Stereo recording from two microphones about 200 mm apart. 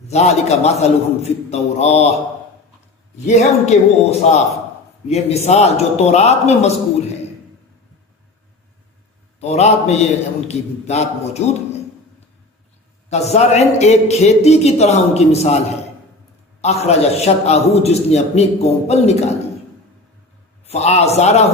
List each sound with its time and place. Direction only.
0.1 s a man's voice: 35° left (ahead or behind)
3.2 s a man's voice: 35° left (ahead or behind)
9.4 s a man's voice: 35° left (ahead or behind)
13.1 s a man's voice: 35° left (ahead or behind)
20.7 s a man's voice: 35° left (ahead or behind)